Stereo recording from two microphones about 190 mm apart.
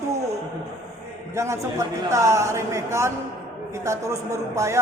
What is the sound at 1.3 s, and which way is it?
A man's voice, 15° right (ahead or behind).